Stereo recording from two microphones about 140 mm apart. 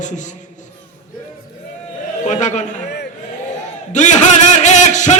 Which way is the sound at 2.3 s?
60° left (ahead or behind).